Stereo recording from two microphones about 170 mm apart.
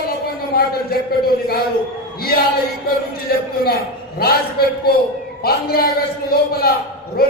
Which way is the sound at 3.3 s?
65° left (ahead or behind).